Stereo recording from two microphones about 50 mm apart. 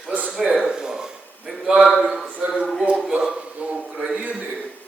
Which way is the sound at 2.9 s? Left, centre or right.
Centre.